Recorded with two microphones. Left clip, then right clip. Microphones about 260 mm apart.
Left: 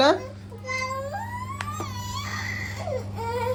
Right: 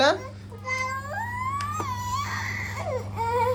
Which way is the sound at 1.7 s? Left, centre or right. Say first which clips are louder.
Right 5 dB; centre.